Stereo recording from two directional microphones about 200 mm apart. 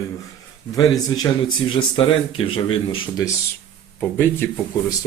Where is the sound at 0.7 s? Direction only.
20° left (ahead or behind).